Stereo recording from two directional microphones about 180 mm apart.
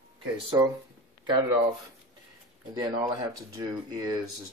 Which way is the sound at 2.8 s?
20° right (ahead or behind).